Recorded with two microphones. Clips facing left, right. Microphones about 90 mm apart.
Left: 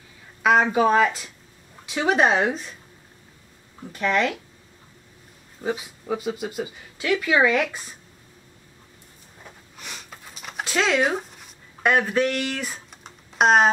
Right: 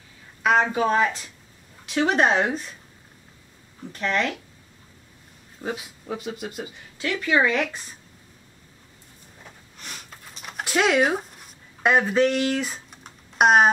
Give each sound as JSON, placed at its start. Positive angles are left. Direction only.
{"t": 0.4, "sound": "a sound", "side_deg": 5}
{"t": 0.7, "sound": "speech", "side_deg": 5}
{"t": 3.9, "sound": "speech", "side_deg": 5}
{"t": 5.6, "sound": "speech", "side_deg": 0}
{"t": 9.8, "sound": "sniff", "side_deg": 0}
{"t": 10.6, "sound": "speech", "side_deg": -10}
{"t": 11.8, "sound": "speech", "side_deg": -20}
{"t": 13.0, "sound": "typing", "side_deg": -5}